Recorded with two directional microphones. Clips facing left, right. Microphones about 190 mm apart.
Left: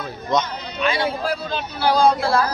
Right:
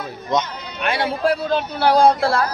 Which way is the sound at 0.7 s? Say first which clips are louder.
Even; 60° right (ahead or behind).